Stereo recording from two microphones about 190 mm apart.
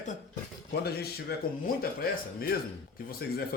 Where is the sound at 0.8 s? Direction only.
55° left (ahead or behind).